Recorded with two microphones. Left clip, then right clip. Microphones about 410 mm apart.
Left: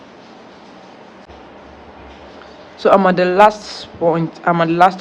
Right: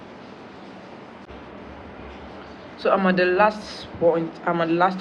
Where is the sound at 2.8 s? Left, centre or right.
Centre.